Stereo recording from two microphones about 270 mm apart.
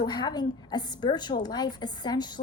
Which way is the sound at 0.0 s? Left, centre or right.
Centre.